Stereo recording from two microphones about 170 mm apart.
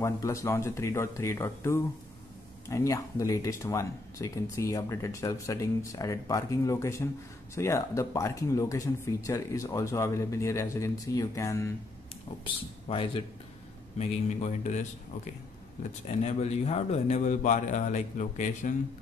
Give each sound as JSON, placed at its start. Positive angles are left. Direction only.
{"t": 0.0, "sound": "speech", "side_deg": 20}
{"t": 12.8, "sound": "speech", "side_deg": 30}
{"t": 13.9, "sound": "speech", "side_deg": 40}
{"t": 16.2, "sound": "speech", "side_deg": 40}